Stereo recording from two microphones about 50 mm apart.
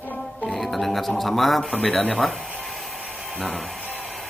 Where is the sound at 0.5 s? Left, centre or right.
Centre.